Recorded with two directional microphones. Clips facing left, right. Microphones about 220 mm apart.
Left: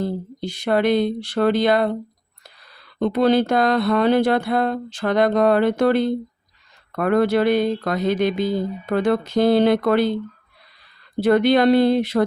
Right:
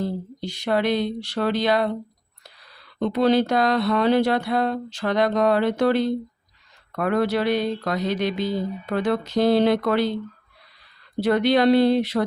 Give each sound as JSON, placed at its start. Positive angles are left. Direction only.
{"t": 0.0, "sound": "speech", "side_deg": 50}
{"t": 3.0, "sound": "speech", "side_deg": 50}
{"t": 11.2, "sound": "speech", "side_deg": 50}